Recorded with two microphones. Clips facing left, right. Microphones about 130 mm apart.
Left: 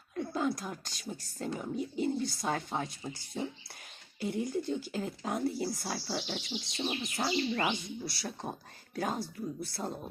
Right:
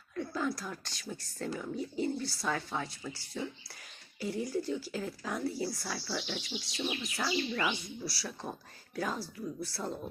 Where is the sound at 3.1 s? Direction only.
20° left (ahead or behind).